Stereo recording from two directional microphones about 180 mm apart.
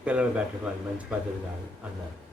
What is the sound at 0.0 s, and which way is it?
Speech, 5° right (ahead or behind).